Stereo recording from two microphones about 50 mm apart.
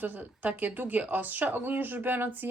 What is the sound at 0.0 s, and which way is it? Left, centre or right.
Speech, right.